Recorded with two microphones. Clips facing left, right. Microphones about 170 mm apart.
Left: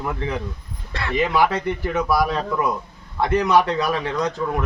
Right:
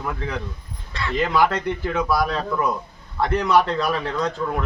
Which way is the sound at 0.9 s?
60° left (ahead or behind).